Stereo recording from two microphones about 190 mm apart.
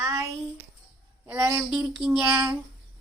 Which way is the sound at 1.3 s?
10° right (ahead or behind).